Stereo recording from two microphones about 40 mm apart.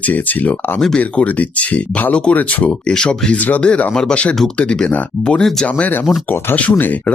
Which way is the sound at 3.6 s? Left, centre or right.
Left.